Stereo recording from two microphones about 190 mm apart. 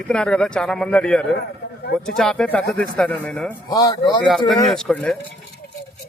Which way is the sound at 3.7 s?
20° left (ahead or behind).